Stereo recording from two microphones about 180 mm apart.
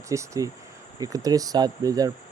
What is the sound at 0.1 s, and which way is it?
Speech, 15° right (ahead or behind).